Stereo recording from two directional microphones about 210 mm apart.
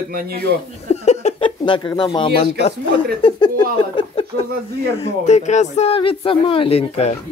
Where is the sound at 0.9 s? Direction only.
30° left (ahead or behind).